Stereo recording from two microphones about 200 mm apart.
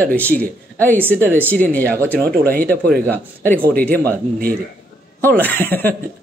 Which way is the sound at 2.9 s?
10° left (ahead or behind).